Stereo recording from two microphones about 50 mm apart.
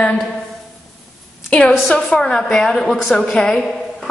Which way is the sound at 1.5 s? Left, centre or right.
Left.